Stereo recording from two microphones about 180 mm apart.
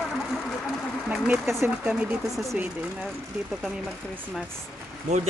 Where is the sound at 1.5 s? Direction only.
10° right (ahead or behind).